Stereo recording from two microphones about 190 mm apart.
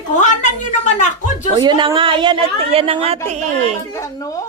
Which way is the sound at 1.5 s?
25° right (ahead or behind).